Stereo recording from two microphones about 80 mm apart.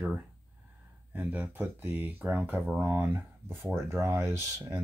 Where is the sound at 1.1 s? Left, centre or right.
Centre.